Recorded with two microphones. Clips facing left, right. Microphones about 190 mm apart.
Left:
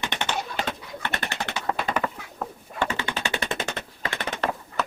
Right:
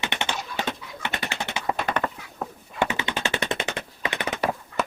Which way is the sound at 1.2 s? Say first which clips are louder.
Even; centre (ahead or behind).